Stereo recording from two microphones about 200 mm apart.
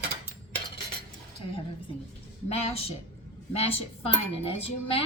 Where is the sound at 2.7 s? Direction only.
30° left (ahead or behind).